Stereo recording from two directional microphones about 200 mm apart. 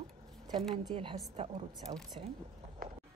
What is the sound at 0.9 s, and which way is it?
Speech, 30° right (ahead or behind).